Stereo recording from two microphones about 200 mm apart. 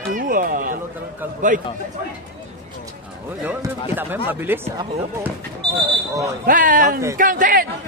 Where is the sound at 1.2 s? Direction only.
10° right (ahead or behind).